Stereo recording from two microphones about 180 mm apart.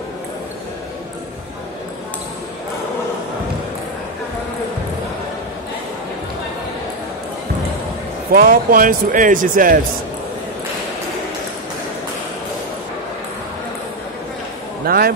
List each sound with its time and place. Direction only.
8.3 s speech: 50° right (ahead or behind)
14.9 s a man's voice: 55° right (ahead or behind)